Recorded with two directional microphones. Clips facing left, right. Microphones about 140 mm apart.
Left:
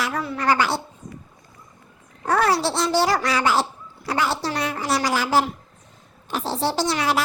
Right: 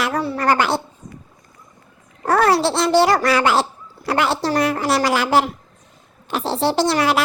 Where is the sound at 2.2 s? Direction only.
55° right (ahead or behind).